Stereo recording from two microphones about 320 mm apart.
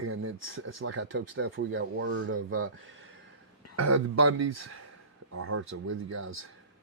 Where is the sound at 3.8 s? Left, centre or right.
Right.